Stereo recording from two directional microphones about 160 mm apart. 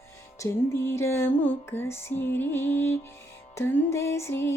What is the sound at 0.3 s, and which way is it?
Music, 20° left (ahead or behind).